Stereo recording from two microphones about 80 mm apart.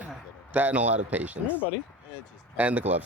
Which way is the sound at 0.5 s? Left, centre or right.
Centre.